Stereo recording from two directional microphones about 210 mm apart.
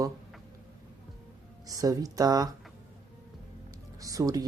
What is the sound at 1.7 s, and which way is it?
Speech, 15° right (ahead or behind).